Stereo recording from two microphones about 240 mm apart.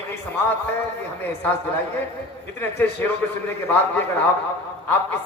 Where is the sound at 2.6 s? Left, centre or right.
Centre.